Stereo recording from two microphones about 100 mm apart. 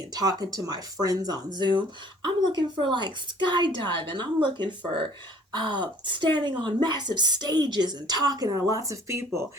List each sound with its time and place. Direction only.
0.1 s a woman's voice: 40° right (ahead or behind)